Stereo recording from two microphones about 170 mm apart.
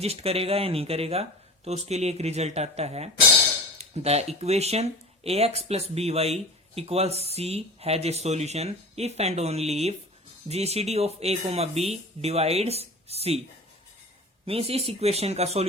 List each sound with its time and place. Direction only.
0.0 s speech: 35° right (ahead or behind)
14.4 s speech: 35° right (ahead or behind)